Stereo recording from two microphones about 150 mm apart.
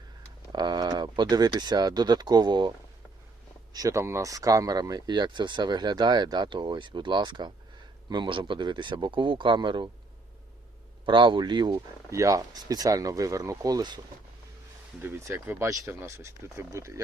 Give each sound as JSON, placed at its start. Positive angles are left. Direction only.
{"t": 0.5, "sound": "speech", "side_deg": -25}
{"t": 11.0, "sound": "speech", "side_deg": -35}
{"t": 15.0, "sound": "speech", "side_deg": -15}